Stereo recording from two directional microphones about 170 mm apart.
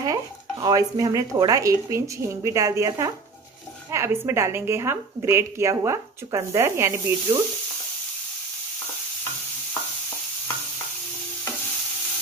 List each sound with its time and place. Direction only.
0.0 s a woman's voice: 20° right (ahead or behind)